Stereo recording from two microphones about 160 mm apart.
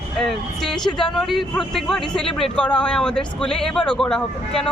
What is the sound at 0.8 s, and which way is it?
Speech, 25° left (ahead or behind).